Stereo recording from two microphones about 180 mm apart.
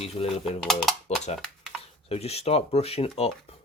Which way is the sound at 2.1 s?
35° left (ahead or behind).